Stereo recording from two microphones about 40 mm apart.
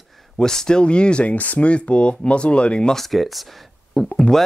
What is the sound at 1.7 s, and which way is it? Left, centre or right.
Speech, left.